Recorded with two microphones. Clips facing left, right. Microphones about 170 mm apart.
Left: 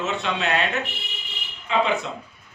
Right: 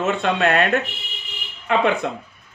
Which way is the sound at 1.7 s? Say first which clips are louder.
Right 2 dB; 60° right (ahead or behind).